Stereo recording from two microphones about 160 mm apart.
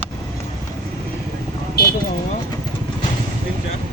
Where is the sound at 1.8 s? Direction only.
75° left (ahead or behind).